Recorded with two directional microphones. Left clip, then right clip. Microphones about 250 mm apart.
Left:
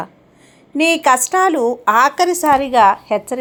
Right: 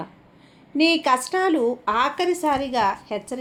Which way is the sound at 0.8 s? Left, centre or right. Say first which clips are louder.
Left 6 dB; centre.